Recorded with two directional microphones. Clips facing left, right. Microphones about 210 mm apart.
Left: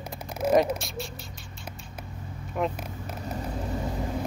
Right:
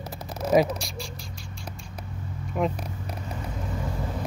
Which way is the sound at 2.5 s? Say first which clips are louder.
Right 2 dB; centre (ahead or behind).